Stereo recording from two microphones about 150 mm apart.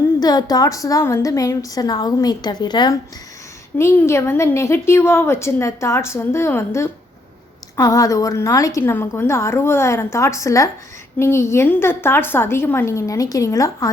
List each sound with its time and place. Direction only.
0.2 s a woman's voice: 25° left (ahead or behind)
3.8 s a woman's voice: 15° left (ahead or behind)